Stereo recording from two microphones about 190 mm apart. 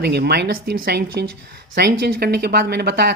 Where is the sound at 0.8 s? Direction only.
60° right (ahead or behind).